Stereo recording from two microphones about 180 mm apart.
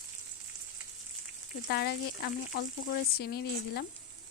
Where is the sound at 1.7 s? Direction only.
65° left (ahead or behind).